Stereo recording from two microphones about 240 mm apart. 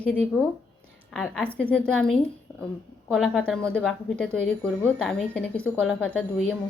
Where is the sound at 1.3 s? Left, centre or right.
Centre.